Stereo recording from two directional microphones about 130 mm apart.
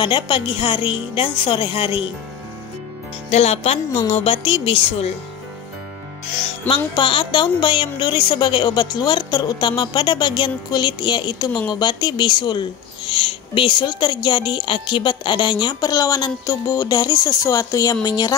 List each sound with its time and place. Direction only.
0.0 s a woman's voice: 40° left (ahead or behind)
3.3 s a woman's voice: 55° left (ahead or behind)
6.9 s a woman's voice: 40° left (ahead or behind)